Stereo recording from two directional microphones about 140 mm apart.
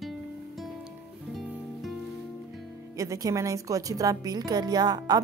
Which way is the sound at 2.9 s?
25° right (ahead or behind).